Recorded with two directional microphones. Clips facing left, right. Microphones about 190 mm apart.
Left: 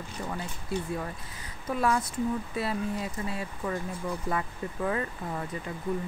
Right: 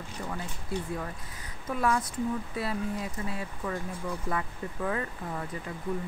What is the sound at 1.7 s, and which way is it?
Speech, 30° left (ahead or behind).